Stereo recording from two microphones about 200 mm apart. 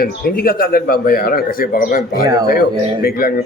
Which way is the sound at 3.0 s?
50° left (ahead or behind).